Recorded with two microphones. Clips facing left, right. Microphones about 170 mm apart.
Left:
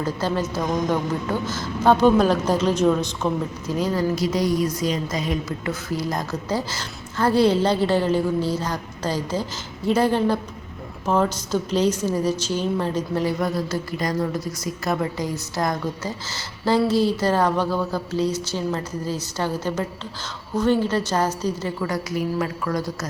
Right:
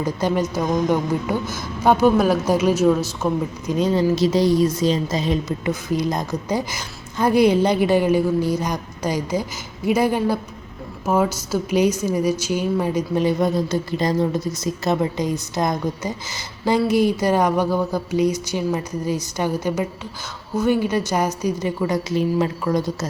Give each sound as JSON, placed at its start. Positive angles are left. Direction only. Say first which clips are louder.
{"t": 0.0, "sound": "a woman's voice", "louder": "right 3 dB", "side_deg": -15}
{"t": 3.7, "sound": "a woman's voice", "louder": "right 4 dB", "side_deg": -20}